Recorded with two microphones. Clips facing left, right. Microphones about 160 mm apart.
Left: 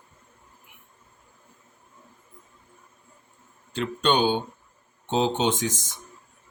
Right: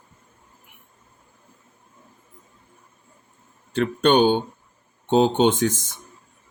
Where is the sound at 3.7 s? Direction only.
55° right (ahead or behind).